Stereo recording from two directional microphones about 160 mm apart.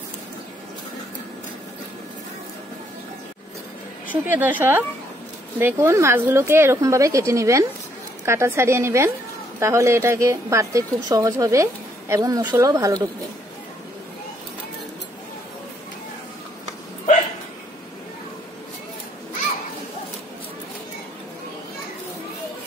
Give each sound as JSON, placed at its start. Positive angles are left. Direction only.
{"t": 4.1, "sound": "a woman's voice", "side_deg": -10}